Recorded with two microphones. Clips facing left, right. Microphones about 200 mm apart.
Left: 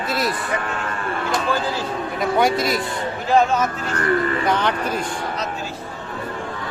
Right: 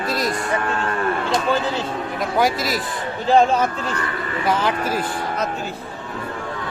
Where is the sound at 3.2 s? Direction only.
30° right (ahead or behind).